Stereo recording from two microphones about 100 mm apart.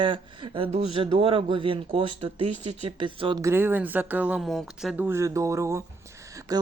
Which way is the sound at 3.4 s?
20° right (ahead or behind).